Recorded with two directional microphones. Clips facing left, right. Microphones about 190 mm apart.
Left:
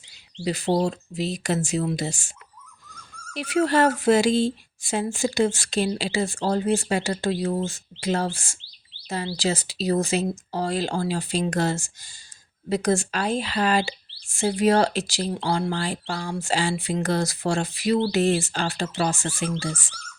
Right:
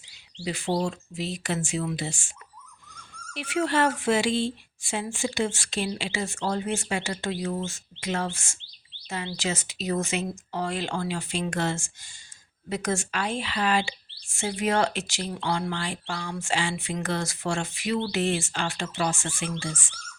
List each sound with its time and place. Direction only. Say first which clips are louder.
0.4 s speech: left 4 dB; 40° left (ahead or behind)
3.3 s speech: left 4 dB; 40° left (ahead or behind)